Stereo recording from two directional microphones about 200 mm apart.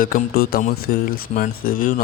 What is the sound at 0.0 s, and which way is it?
A man's voice, 50° left (ahead or behind).